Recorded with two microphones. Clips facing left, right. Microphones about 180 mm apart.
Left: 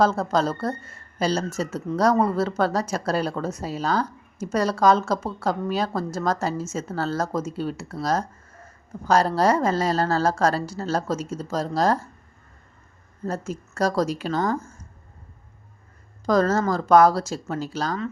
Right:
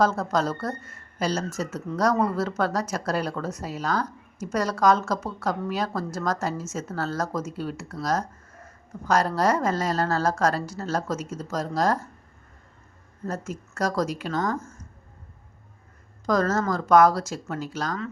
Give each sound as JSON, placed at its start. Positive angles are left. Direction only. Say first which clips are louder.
{"t": 0.0, "sound": "a woman's voice", "louder": "left 2 dB", "side_deg": 30}
{"t": 13.2, "sound": "speech", "louder": "left 3 dB", "side_deg": 30}
{"t": 16.2, "sound": "a woman's voice", "louder": "left 3 dB", "side_deg": 30}